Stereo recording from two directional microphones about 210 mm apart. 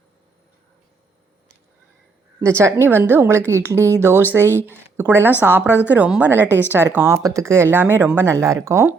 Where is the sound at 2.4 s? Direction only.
15° right (ahead or behind).